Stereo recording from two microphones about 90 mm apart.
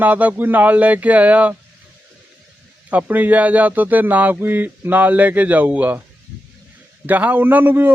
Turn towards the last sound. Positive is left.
turn(degrees=-25)  # may be behind; listen again after turning